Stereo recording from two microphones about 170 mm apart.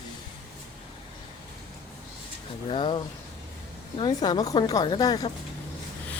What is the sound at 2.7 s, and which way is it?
A woman's voice, 30° left (ahead or behind).